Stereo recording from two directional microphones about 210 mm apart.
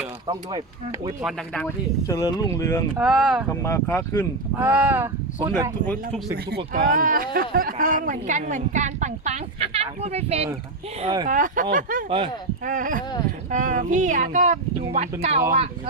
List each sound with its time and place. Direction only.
0.3 s speech: 20° right (ahead or behind)
1.2 s speech: 5° left (ahead or behind)
2.0 s speech: 15° left (ahead or behind)
3.0 s speech: 5° right (ahead or behind)
3.5 s speech: 15° left (ahead or behind)
4.6 s speech: 5° right (ahead or behind)
5.8 s speech: 5° left (ahead or behind)
6.7 s a woman's voice: 40° right (ahead or behind); by 11.3 s 20° right (ahead or behind)
11.3 s a woman's voice: 40° right (ahead or behind)
12.0 s speech: 25° right (ahead or behind)
12.6 s a woman's voice: 40° right (ahead or behind)